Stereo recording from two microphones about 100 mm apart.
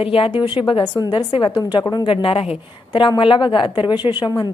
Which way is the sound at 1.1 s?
60° left (ahead or behind).